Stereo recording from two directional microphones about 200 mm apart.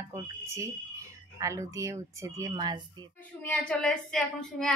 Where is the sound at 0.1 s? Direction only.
15° right (ahead or behind).